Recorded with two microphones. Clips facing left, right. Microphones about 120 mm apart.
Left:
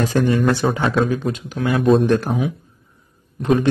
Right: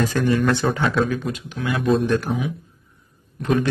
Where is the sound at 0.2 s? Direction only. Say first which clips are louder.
Left 4 dB; 25° left (ahead or behind).